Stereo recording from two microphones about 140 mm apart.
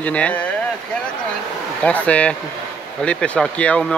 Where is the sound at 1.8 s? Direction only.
10° left (ahead or behind).